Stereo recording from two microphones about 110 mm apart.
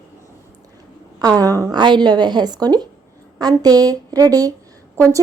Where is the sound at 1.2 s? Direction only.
35° right (ahead or behind).